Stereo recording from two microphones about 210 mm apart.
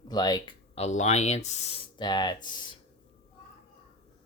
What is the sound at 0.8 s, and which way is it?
Speech, 35° left (ahead or behind).